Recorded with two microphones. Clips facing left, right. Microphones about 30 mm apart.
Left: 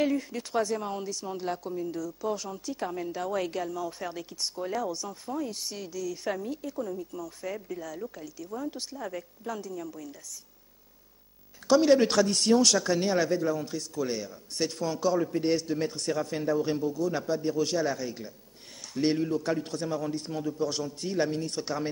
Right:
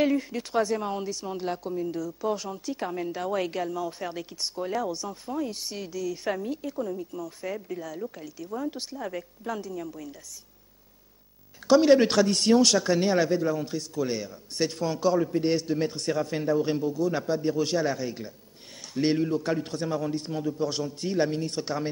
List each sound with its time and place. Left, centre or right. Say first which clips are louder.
0.0 s a woman's voice: right 3 dB; centre
11.6 s a woman's voice: right 3 dB; centre